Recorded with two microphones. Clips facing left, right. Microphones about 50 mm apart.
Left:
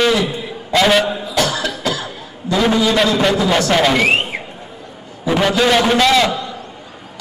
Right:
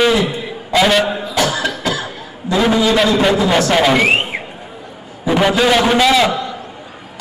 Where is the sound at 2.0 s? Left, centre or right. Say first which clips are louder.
Right 2 dB; centre.